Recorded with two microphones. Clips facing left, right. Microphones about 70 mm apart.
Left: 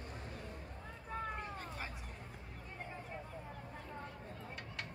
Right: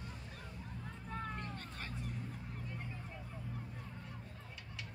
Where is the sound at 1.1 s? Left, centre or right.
Centre.